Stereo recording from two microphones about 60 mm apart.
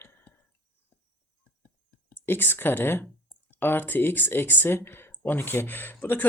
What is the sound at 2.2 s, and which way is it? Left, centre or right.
Speech, left.